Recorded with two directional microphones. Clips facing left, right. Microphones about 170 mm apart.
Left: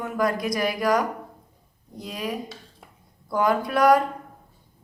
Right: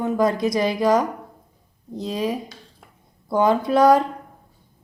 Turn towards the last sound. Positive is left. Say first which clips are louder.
# right 3 dB
turn(degrees=-25)  # may be behind; listen again after turning